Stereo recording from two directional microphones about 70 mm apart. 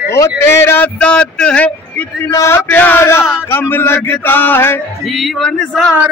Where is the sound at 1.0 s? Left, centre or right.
Centre.